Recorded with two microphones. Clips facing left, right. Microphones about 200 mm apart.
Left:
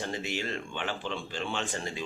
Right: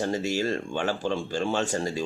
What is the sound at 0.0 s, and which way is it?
Speech, 40° right (ahead or behind).